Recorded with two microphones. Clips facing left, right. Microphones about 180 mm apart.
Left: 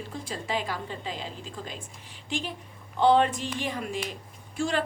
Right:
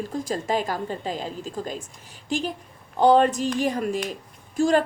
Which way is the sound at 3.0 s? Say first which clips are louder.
Right 4 dB; 40° right (ahead or behind).